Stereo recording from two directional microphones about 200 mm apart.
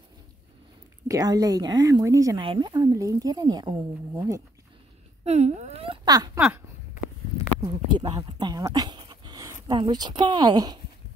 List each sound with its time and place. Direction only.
1.0 s speech: 15° right (ahead or behind)
5.2 s speech: 35° right (ahead or behind); by 6.4 s 20° right (ahead or behind)
7.6 s speech: 25° right (ahead or behind)